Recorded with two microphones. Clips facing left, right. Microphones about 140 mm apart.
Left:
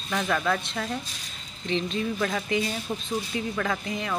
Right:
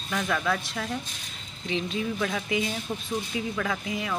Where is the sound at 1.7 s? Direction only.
10° right (ahead or behind).